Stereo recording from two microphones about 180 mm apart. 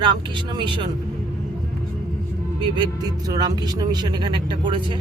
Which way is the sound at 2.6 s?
25° right (ahead or behind).